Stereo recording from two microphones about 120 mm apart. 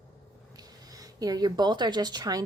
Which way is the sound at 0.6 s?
30° right (ahead or behind).